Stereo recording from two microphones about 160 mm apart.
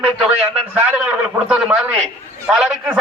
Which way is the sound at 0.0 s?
5° right (ahead or behind).